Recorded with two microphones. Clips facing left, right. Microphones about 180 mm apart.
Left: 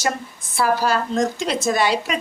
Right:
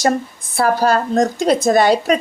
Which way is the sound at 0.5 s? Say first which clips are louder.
Right 4 dB; 40° right (ahead or behind).